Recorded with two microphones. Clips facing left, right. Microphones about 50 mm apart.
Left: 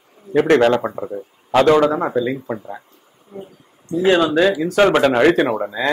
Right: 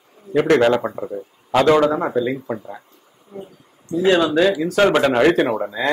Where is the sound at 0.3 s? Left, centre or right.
Right.